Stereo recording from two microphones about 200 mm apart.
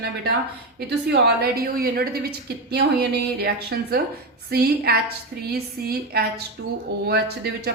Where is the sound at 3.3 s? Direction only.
50° right (ahead or behind).